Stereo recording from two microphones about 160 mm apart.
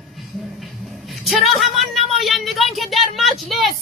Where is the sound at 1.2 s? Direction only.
Centre (ahead or behind).